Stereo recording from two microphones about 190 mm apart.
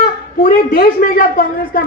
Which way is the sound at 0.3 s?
50° left (ahead or behind).